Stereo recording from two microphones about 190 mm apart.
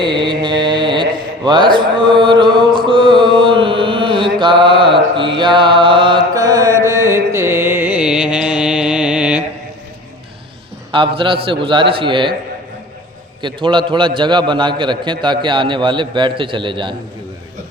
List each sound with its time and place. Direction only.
0.0 s mantra: 25° right (ahead or behind); by 9.4 s 5° right (ahead or behind)
10.9 s a man's voice: 25° right (ahead or behind)
13.4 s a man's voice: 25° right (ahead or behind)